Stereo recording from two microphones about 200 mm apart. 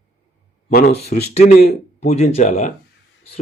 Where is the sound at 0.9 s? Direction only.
30° left (ahead or behind).